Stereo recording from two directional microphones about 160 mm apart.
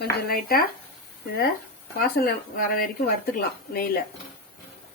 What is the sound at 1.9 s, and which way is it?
Speech, 65° left (ahead or behind).